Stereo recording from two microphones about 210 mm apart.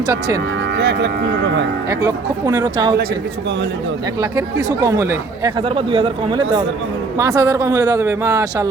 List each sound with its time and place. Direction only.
0.8 s speech: 55° right (ahead or behind)
1.9 s speech: 15° right (ahead or behind)
4.2 s speech: 15° right (ahead or behind)
5.6 s speech: 25° right (ahead or behind)